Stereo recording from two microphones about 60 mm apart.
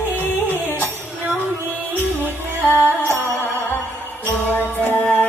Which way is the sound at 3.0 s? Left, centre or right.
Right.